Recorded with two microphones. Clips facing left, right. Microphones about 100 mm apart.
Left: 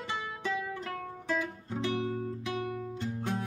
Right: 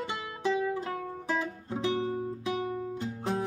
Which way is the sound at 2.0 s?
30° right (ahead or behind).